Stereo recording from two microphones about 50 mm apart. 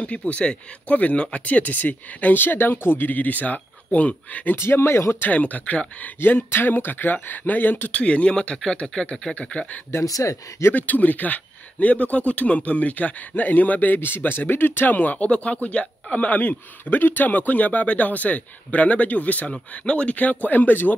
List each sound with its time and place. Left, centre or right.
0.0 s speech: left
4.6 s speech: left
5.3 s speech: left
6.1 s speech: left
7.9 s speech: left
9.8 s speech: left
10.7 s speech: left
15.2 s speech: left